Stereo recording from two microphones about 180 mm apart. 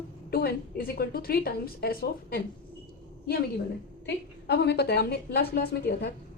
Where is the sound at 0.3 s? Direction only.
60° left (ahead or behind).